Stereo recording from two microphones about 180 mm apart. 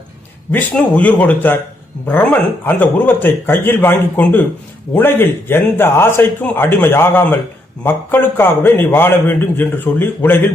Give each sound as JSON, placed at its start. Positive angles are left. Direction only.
{"t": 0.5, "sound": "a man's voice", "side_deg": 10}